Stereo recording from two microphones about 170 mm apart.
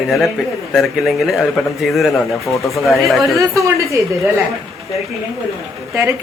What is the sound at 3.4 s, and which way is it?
Speech, 20° right (ahead or behind).